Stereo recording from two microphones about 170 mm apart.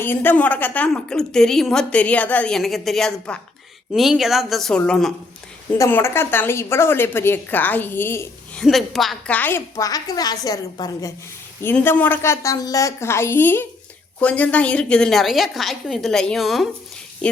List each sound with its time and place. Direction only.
0.0 s a woman's voice: 10° left (ahead or behind)
5.7 s a woman's voice: 15° left (ahead or behind)
8.6 s a woman's voice: centre (ahead or behind)